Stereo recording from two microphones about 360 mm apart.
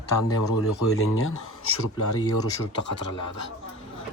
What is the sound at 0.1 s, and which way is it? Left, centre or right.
Speech, left.